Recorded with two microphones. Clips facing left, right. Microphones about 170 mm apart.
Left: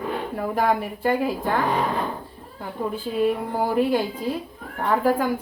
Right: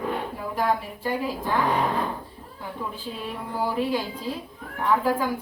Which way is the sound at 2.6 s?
50° left (ahead or behind).